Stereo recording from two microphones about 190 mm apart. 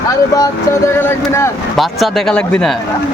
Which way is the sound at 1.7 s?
Centre (ahead or behind).